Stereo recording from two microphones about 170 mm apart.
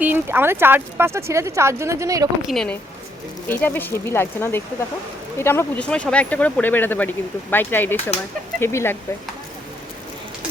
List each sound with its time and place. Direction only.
0.0 s speech: 10° right (ahead or behind)
2.5 s a woman's voice: centre (ahead or behind)